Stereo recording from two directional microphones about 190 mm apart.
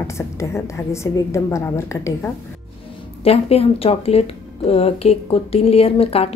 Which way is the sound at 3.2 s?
30° left (ahead or behind).